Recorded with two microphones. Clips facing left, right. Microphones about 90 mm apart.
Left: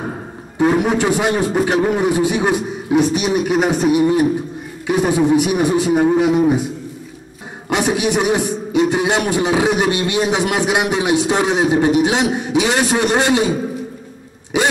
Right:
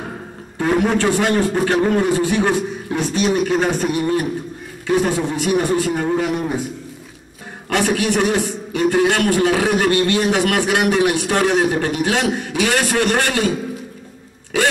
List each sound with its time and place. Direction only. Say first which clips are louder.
0.6 s a man's voice: left 2 dB; 15° left (ahead or behind)
7.7 s a man's voice: left 1 dB; 20° left (ahead or behind)